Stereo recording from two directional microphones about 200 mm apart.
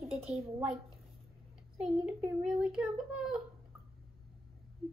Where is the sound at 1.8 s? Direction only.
5° right (ahead or behind).